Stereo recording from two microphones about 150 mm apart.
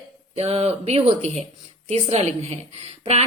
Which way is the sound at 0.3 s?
45° right (ahead or behind).